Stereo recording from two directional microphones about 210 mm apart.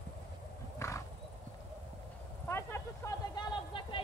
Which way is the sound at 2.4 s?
10° left (ahead or behind).